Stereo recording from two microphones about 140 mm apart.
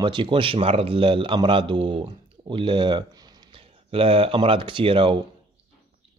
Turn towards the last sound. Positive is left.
turn(degrees=-35)  # may be behind; listen again after turning